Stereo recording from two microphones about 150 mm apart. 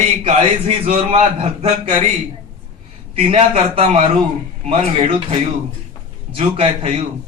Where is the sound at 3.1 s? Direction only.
40° right (ahead or behind).